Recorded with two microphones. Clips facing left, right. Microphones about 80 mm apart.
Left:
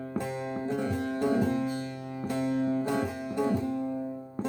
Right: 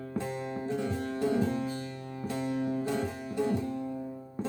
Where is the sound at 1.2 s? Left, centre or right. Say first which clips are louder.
Left 2 dB; left.